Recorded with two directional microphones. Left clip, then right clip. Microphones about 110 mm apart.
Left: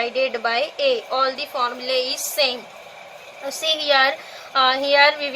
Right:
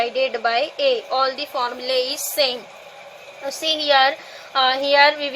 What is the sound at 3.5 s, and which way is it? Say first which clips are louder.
A woman's voice: right 1 dB; 35° right (ahead or behind).